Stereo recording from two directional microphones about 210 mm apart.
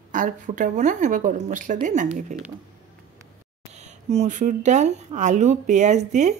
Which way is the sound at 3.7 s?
30° right (ahead or behind).